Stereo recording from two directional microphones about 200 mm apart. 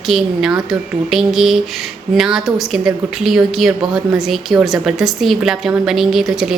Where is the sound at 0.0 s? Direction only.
Centre (ahead or behind).